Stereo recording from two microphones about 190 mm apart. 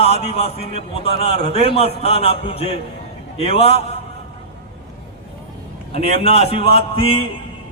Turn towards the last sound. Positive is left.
turn(degrees=30)  # may be behind; listen again after turning